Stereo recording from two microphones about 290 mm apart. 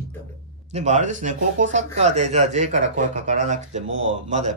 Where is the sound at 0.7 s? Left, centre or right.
Right.